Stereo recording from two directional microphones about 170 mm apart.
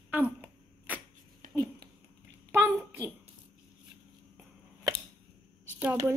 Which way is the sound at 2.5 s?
15° right (ahead or behind).